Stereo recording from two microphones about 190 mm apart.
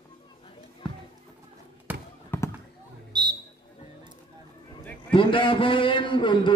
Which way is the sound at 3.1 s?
20° right (ahead or behind).